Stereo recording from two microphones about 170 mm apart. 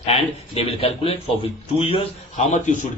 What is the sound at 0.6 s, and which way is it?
A man's voice, 35° left (ahead or behind).